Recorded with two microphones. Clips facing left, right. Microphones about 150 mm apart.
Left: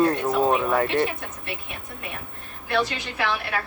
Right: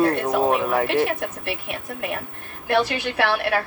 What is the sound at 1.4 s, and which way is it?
A woman's voice, 70° right (ahead or behind).